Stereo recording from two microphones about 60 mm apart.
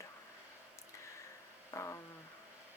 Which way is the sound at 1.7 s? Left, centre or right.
Left.